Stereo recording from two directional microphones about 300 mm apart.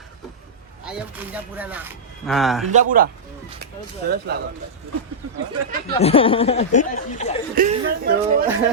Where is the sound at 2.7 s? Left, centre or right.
Right.